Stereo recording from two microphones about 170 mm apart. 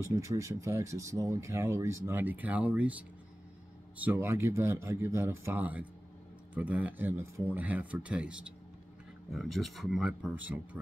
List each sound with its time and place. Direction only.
0.0 s speech: 20° right (ahead or behind)